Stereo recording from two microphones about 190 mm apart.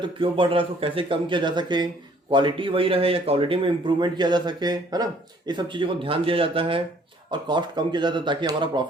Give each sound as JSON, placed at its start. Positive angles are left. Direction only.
{"t": 0.0, "sound": "a man's voice", "side_deg": -25}